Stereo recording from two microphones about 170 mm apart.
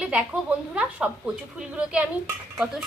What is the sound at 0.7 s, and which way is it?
A woman's voice, 5° right (ahead or behind).